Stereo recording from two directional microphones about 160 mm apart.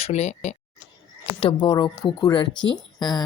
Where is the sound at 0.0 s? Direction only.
45° left (ahead or behind).